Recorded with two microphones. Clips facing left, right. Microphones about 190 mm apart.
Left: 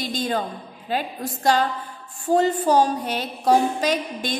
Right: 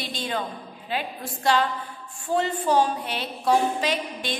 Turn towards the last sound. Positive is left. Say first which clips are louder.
# left 4 dB
turn(degrees=45)  # may be behind; listen again after turning